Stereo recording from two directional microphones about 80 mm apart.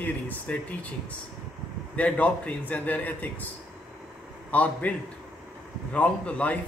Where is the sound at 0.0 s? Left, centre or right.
Left.